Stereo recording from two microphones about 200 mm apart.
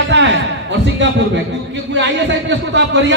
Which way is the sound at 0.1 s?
60° right (ahead or behind).